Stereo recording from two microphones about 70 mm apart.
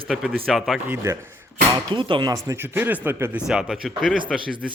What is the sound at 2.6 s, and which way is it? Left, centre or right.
Speech, right.